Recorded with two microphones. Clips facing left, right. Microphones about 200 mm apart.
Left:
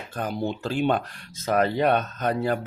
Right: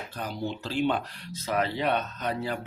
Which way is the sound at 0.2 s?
50° left (ahead or behind).